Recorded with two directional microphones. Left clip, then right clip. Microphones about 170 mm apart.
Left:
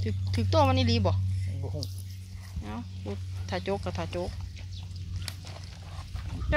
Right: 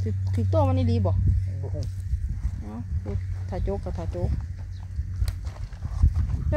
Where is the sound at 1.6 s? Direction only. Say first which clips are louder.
Right 2 dB; 10° right (ahead or behind).